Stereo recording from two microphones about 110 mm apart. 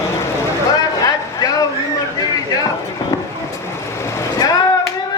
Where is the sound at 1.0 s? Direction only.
30° left (ahead or behind).